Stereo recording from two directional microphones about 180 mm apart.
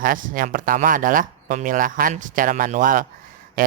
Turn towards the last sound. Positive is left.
turn(degrees=-50)  # may be behind; listen again after turning